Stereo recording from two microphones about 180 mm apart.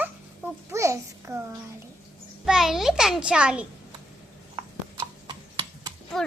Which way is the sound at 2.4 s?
Centre (ahead or behind).